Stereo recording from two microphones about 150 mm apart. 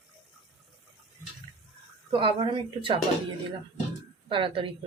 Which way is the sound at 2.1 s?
35° right (ahead or behind).